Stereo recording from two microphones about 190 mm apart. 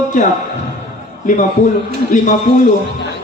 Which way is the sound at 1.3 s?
40° left (ahead or behind).